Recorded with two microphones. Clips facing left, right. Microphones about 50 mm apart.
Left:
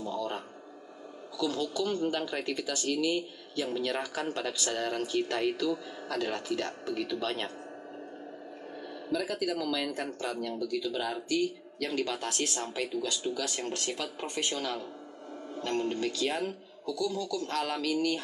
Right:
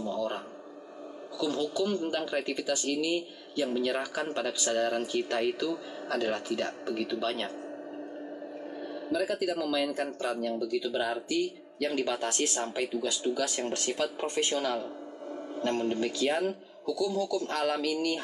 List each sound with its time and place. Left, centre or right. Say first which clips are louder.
0.0 s music: right 2 dB; centre
1.4 s speech: right 1 dB; centre
9.1 s speech: right 2 dB; centre
15.8 s speech: even; centre
16.1 s speech: right 3 dB; right